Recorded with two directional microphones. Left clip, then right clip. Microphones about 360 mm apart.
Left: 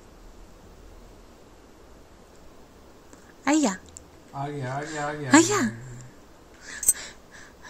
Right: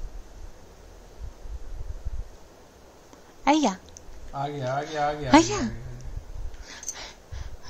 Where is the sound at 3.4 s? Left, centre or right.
Centre.